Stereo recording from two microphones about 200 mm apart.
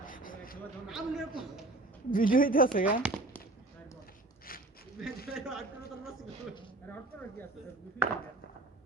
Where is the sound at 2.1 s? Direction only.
45° left (ahead or behind).